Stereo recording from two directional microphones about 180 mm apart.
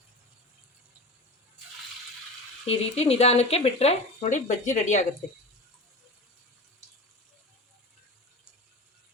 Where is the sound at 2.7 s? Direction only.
35° left (ahead or behind).